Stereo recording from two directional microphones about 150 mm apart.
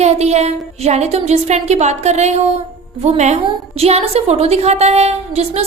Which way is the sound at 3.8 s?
45° right (ahead or behind).